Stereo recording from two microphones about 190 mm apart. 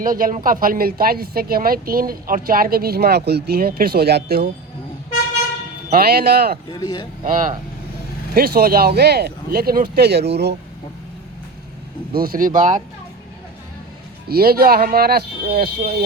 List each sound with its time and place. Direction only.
0.0 s speech: 45° right (ahead or behind)
5.9 s speech: 55° right (ahead or behind)
6.7 s speech: 20° left (ahead or behind)
7.3 s speech: 45° right (ahead or behind)
12.1 s speech: 50° right (ahead or behind)
14.3 s speech: 55° right (ahead or behind)